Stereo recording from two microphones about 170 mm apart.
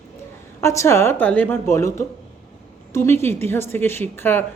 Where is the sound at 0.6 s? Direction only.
15° left (ahead or behind).